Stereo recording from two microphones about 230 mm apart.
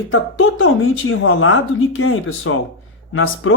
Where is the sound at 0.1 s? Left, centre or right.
Left.